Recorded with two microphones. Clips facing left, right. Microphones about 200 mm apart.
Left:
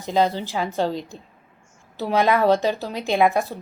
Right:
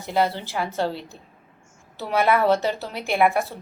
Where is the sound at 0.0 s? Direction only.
15° left (ahead or behind).